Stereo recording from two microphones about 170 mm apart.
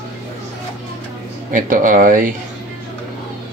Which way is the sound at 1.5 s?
50° right (ahead or behind).